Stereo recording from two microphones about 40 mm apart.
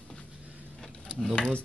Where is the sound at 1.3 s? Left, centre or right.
Left.